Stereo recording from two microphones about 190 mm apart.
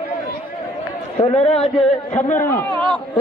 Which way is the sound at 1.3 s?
30° left (ahead or behind).